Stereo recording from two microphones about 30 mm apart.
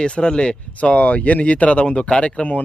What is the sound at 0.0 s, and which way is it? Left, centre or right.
Speech, left.